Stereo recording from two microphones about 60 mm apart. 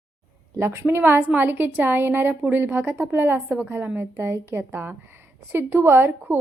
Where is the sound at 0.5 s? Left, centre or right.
Right.